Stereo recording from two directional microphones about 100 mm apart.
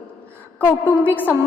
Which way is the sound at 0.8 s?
15° left (ahead or behind).